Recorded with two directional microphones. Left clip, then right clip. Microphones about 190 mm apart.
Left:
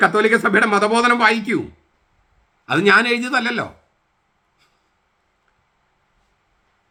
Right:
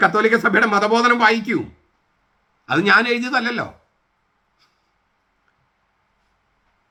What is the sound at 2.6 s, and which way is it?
A man's voice, 20° left (ahead or behind).